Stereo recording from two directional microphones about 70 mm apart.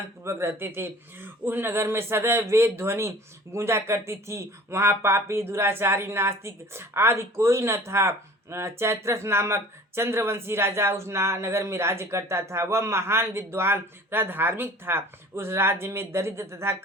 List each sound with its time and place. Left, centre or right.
0.3 s speech: right